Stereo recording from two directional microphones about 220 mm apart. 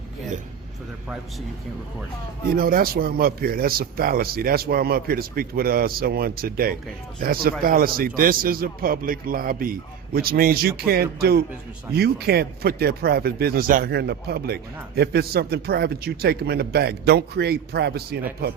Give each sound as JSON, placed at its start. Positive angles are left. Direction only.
{"t": 1.0, "sound": "speech", "side_deg": 0}
{"t": 2.5, "sound": "a man's voice", "side_deg": -40}